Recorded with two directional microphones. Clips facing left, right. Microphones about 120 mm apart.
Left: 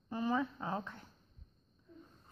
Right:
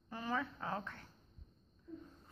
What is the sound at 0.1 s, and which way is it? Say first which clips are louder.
Speech: left 5 dB; 20° left (ahead or behind).